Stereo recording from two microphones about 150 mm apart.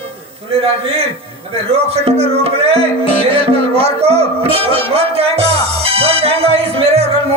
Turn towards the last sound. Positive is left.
turn(degrees=-40)  # may be behind; listen again after turning